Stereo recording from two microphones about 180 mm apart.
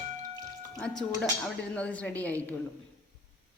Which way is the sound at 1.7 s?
5° left (ahead or behind).